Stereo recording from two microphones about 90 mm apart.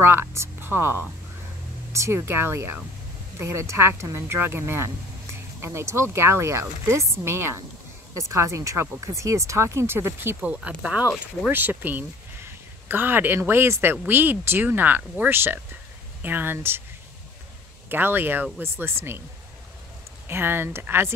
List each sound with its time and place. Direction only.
0.0 s a woman's voice: 25° right (ahead or behind)
17.8 s speech: 20° right (ahead or behind)
20.2 s speech: 25° right (ahead or behind)